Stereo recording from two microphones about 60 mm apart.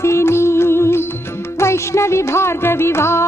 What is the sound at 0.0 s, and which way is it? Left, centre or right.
Music, left.